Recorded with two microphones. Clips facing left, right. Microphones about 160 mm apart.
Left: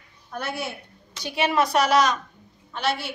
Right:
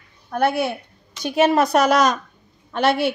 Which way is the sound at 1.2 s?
45° right (ahead or behind).